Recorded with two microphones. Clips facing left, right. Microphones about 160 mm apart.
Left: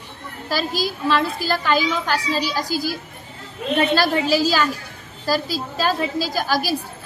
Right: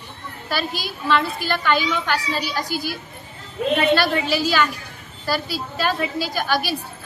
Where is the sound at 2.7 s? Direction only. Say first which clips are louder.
Left 4 dB; 90° left.